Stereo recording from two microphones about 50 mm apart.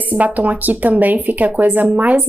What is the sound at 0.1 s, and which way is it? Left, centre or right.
Speech, right.